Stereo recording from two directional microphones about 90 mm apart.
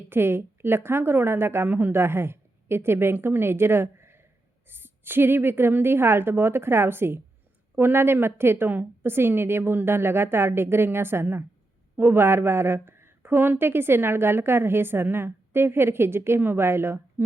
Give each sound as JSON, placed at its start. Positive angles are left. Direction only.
{"t": 0.1, "sound": "a woman's voice", "side_deg": -25}